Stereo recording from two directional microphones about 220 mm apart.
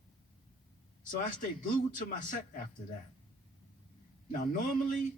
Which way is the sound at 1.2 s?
35° left (ahead or behind).